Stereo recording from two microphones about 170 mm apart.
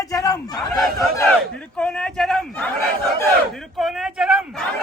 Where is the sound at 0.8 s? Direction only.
Centre (ahead or behind).